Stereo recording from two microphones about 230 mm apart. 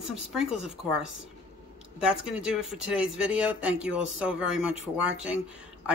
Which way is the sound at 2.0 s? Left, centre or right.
Centre.